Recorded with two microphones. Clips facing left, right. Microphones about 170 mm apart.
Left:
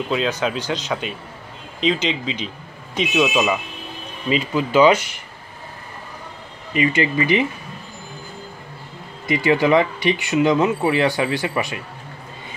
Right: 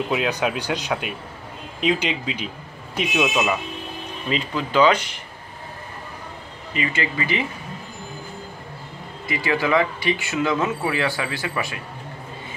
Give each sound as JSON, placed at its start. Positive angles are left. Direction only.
{"t": 0.1, "sound": "speech", "side_deg": -10}
{"t": 4.3, "sound": "speech", "side_deg": 10}
{"t": 6.7, "sound": "speech", "side_deg": 20}
{"t": 9.3, "sound": "speech", "side_deg": 20}